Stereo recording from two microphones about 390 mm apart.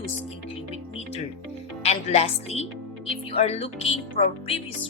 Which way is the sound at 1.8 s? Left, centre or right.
Centre.